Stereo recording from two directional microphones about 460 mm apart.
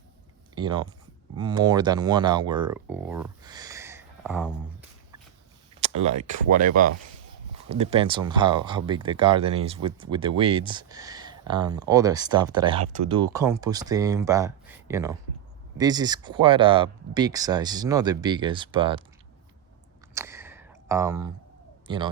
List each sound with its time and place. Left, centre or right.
0.5 s speech: centre
5.8 s speech: centre
20.1 s a sound: centre
21.8 s speech: centre